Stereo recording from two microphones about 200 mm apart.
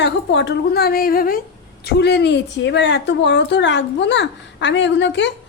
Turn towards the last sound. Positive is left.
turn(degrees=65)  # may be behind; listen again after turning